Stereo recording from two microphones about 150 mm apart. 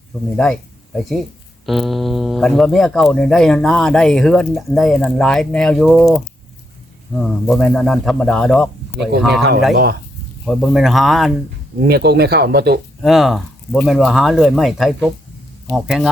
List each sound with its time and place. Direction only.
0.3 s speech: 5° left (ahead or behind)
10.4 s speech: centre (ahead or behind)
11.9 s speech: 90° right
13.0 s speech: centre (ahead or behind)